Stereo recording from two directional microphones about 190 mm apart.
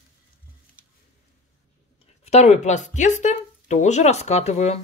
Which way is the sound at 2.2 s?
35° left (ahead or behind).